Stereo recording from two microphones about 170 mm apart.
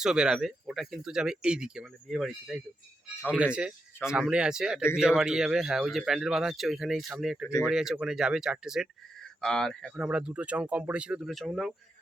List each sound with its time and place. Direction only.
0.0 s speech: 5° right (ahead or behind)